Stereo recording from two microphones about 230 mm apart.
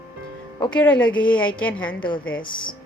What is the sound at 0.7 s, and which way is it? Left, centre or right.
A woman's voice, centre.